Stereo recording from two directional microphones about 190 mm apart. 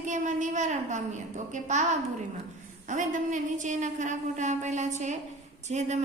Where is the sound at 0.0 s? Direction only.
40° right (ahead or behind).